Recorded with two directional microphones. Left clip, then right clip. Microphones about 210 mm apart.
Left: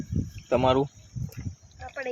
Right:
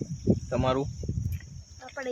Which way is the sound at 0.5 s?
10° left (ahead or behind).